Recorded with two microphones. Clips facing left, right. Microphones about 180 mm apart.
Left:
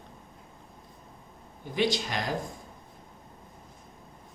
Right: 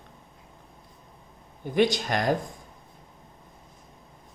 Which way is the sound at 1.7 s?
50° right (ahead or behind).